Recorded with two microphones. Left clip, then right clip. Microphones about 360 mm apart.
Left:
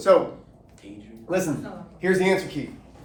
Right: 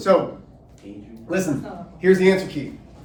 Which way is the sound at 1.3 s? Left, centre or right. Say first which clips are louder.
Right 1 dB; centre.